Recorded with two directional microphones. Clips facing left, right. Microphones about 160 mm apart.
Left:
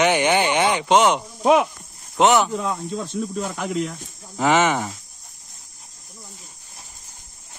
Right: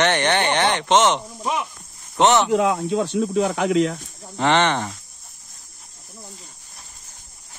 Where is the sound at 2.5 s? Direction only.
80° right.